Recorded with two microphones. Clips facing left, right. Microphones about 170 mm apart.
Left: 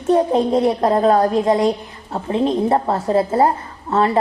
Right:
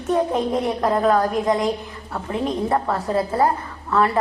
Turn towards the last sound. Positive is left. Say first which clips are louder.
# left 3 dB
turn(degrees=25)  # may be behind; listen again after turning